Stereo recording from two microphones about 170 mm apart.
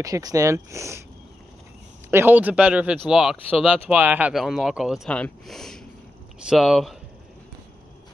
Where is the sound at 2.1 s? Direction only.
10° right (ahead or behind).